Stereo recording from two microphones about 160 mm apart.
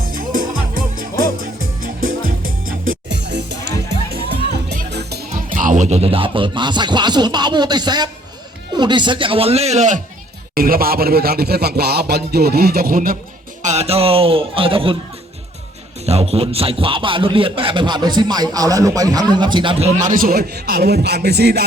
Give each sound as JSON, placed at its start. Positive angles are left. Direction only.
{"t": 0.0, "sound": "music", "side_deg": -60}
{"t": 4.9, "sound": "music", "side_deg": -90}
{"t": 8.7, "sound": "speech", "side_deg": -30}
{"t": 10.5, "sound": "a sound", "side_deg": -65}
{"t": 13.6, "sound": "speech", "side_deg": -45}
{"t": 16.0, "sound": "speech", "side_deg": -40}
{"t": 20.0, "sound": "a man's voice", "side_deg": -60}